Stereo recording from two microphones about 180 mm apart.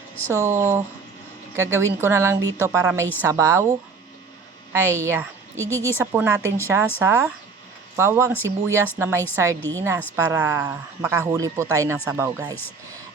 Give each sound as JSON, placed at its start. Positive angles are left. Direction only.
{"t": 0.3, "sound": "a woman's voice", "side_deg": -15}